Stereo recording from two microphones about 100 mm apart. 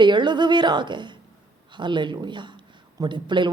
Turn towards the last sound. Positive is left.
turn(degrees=-50)  # may be behind; listen again after turning